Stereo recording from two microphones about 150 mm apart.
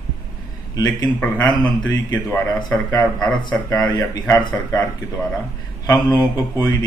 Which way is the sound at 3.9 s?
25° left (ahead or behind).